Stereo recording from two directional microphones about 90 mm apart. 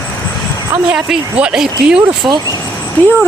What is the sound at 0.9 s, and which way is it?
Speech, 10° right (ahead or behind).